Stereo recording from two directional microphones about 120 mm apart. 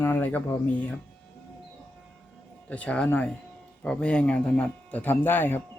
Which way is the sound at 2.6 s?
10° left (ahead or behind).